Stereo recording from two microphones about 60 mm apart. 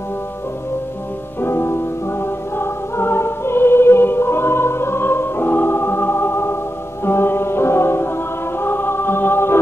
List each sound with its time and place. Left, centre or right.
1.4 s music: left
8.5 s choir: left